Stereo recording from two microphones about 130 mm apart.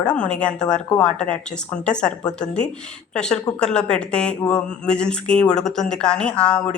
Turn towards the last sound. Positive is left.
turn(degrees=5)  # may be behind; listen again after turning